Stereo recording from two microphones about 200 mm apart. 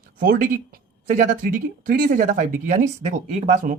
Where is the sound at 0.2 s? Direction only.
45° right (ahead or behind).